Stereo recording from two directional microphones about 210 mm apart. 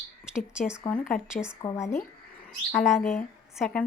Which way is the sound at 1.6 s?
15° left (ahead or behind).